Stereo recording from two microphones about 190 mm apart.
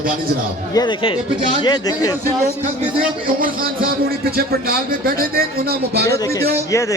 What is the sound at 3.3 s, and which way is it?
A man's voice, 50° right (ahead or behind).